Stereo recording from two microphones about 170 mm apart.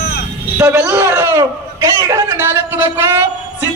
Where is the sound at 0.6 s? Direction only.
15° right (ahead or behind).